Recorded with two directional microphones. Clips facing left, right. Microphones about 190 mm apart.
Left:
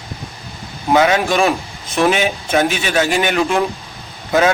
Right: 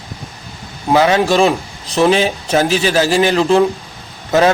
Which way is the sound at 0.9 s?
30° right (ahead or behind).